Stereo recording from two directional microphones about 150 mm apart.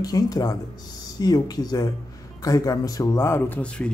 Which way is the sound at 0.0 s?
25° left (ahead or behind).